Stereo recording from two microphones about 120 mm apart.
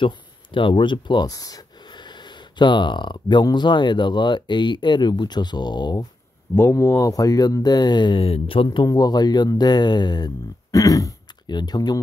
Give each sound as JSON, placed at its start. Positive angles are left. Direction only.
{"t": 0.0, "sound": "speech", "side_deg": 45}
{"t": 6.5, "sound": "speech", "side_deg": 25}
{"t": 8.8, "sound": "speech", "side_deg": 35}